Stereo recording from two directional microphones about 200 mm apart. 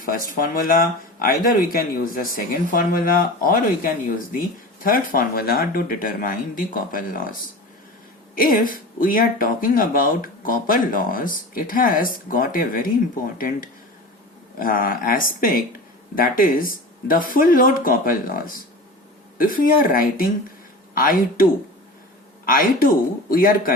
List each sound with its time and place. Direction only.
0.0 s speech: 45° left (ahead or behind)
4.8 s speech: 45° left (ahead or behind)
8.4 s speech: 45° left (ahead or behind)
14.6 s speech: 45° left (ahead or behind)
22.4 s speech: 45° left (ahead or behind)